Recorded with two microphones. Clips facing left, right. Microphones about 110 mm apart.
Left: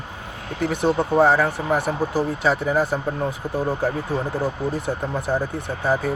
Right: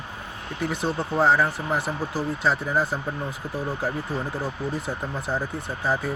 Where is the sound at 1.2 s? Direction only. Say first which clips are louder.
Right 1 dB; 50° left (ahead or behind).